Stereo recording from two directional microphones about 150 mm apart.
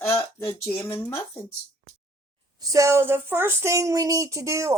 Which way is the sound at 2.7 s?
20° right (ahead or behind).